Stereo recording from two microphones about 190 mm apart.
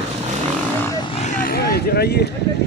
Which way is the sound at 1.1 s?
40° left (ahead or behind).